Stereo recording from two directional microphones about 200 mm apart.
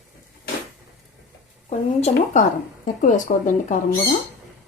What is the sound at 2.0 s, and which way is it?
A woman's voice, 40° left (ahead or behind).